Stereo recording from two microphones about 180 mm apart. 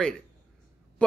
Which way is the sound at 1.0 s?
5° left (ahead or behind).